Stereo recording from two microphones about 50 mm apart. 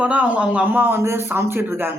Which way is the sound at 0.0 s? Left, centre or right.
Right.